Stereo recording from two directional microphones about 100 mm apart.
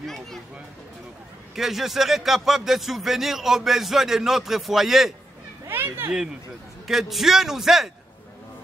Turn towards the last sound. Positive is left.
turn(degrees=-5)  # may be behind; listen again after turning